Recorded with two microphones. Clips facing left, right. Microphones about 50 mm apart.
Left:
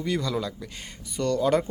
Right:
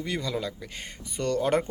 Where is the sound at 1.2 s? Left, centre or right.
Right.